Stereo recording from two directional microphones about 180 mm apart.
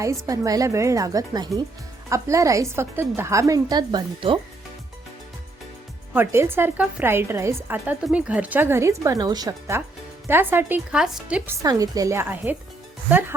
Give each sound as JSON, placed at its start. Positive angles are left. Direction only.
{"t": 0.3, "sound": "a woman's voice", "side_deg": -20}
{"t": 6.1, "sound": "a woman's voice", "side_deg": -15}
{"t": 11.6, "sound": "a woman's voice", "side_deg": -20}